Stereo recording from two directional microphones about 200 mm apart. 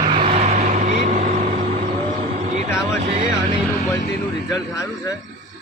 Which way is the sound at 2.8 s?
35° right (ahead or behind).